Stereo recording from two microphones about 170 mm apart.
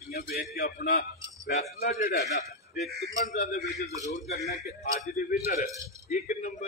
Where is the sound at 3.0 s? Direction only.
50° left (ahead or behind).